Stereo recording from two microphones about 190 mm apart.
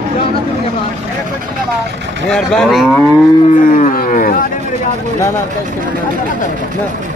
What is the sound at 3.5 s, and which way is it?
Cattle, 45° left (ahead or behind).